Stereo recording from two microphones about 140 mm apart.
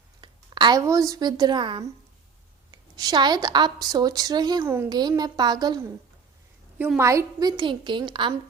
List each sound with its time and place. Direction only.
0.2 s a woman's voice: 35° right (ahead or behind)
6.7 s a woman's voice: 10° right (ahead or behind); by 8.3 s 35° right (ahead or behind)